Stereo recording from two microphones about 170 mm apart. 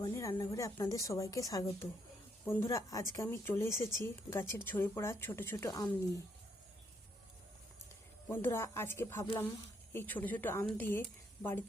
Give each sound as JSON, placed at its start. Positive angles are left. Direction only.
{"t": 0.1, "sound": "a woman's voice", "side_deg": 20}
{"t": 8.3, "sound": "speech", "side_deg": 15}